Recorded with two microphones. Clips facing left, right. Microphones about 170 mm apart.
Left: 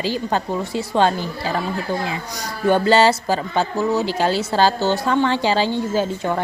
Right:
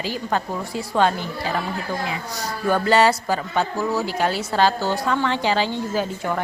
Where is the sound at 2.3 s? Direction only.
25° left (ahead or behind).